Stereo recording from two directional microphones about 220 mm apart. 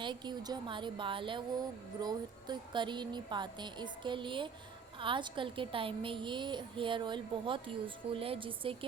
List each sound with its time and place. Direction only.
0.0 s a woman's voice: 20° right (ahead or behind)